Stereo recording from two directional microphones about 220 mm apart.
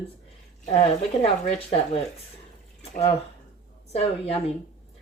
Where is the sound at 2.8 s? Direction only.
25° left (ahead or behind).